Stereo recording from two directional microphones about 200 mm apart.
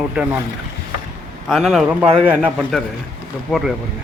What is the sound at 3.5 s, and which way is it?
Speech, centre (ahead or behind).